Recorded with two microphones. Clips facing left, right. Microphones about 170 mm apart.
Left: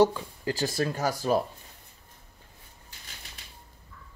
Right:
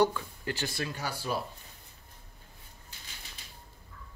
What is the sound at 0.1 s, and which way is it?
Speech, 30° left (ahead or behind).